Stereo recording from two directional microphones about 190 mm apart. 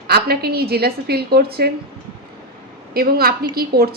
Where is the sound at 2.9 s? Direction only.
55° right (ahead or behind).